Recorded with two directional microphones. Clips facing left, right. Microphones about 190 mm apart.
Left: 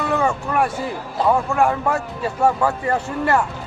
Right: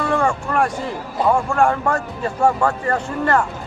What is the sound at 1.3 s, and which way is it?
Speech, 5° left (ahead or behind).